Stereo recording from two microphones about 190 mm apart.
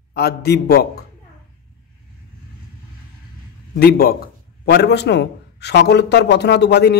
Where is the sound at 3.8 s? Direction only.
50° left (ahead or behind).